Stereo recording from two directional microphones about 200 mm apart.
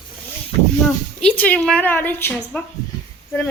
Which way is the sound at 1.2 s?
5° left (ahead or behind).